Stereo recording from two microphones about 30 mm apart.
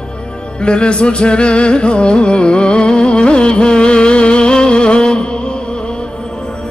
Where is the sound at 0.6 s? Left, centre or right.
Left.